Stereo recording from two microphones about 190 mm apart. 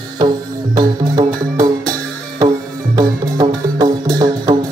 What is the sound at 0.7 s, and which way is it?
Music, 20° right (ahead or behind).